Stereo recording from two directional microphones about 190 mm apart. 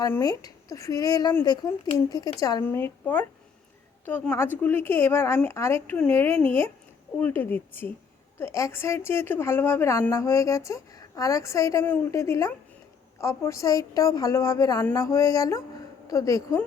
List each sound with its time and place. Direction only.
0.0 s a woman's voice: 20° left (ahead or behind)